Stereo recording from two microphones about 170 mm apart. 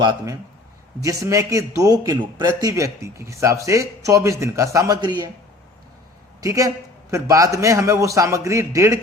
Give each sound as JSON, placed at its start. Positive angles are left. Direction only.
{"t": 1.0, "sound": "a man's voice", "side_deg": -20}
{"t": 6.4, "sound": "a man's voice", "side_deg": -20}